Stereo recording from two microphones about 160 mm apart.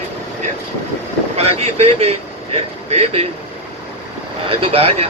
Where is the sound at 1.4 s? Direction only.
40° right (ahead or behind).